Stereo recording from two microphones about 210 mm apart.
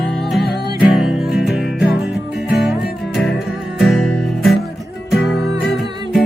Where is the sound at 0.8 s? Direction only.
Centre (ahead or behind).